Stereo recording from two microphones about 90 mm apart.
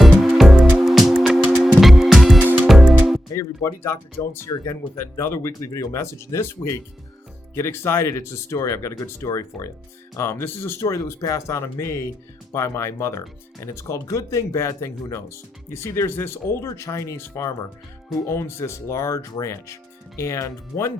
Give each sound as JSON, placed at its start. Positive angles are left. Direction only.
{"t": 0.2, "sound": "music", "side_deg": -5}
{"t": 3.3, "sound": "speech", "side_deg": 30}